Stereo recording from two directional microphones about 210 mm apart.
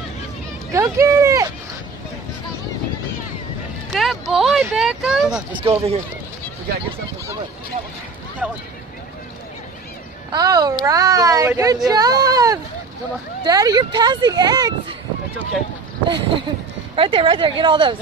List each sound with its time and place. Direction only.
0.9 s speech: 15° right (ahead or behind)
3.9 s speech: centre (ahead or behind)
5.5 s speech: 25° right (ahead or behind)
8.4 s speech: 5° right (ahead or behind)
10.3 s speech: 20° right (ahead or behind)
16.1 s speech: 25° right (ahead or behind)